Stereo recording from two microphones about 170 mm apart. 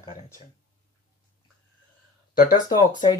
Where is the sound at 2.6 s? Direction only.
25° left (ahead or behind).